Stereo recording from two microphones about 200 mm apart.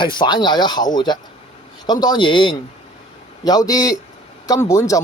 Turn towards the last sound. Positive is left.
turn(degrees=15)  # may be behind; listen again after turning